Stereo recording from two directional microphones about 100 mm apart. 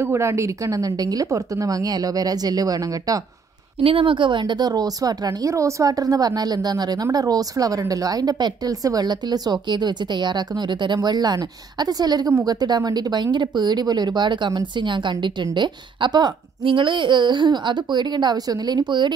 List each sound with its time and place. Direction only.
0.0 s a woman's voice: 30° right (ahead or behind)
3.8 s a woman's voice: 60° right (ahead or behind)